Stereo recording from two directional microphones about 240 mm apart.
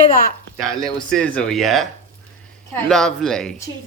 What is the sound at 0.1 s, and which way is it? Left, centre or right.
Speech, left.